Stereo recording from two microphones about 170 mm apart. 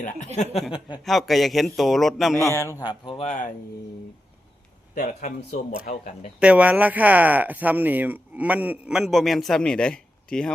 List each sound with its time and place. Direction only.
0.4 s speech: 45° left (ahead or behind)
1.0 s a man's voice: centre (ahead or behind)
2.3 s a man's voice: 15° left (ahead or behind)
4.9 s speech: 45° left (ahead or behind)
6.4 s speech: 5° right (ahead or behind)